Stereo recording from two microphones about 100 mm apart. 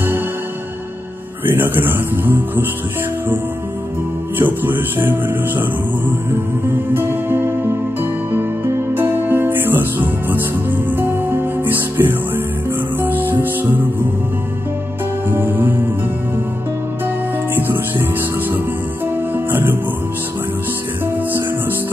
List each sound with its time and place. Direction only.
1.5 s music: 20° right (ahead or behind)
4.4 s music: 20° right (ahead or behind)
6.9 s music: 20° right (ahead or behind)
15.2 s music: 20° right (ahead or behind)
19.3 s music: 20° right (ahead or behind)